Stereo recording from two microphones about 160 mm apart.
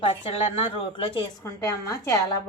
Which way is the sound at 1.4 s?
15° left (ahead or behind).